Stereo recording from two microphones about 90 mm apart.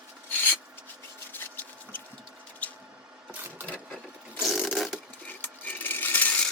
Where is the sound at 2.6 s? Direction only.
20° left (ahead or behind).